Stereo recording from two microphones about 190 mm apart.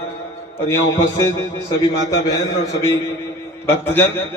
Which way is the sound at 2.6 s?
15° left (ahead or behind).